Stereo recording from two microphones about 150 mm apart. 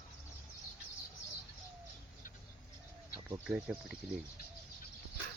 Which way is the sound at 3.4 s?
5° right (ahead or behind).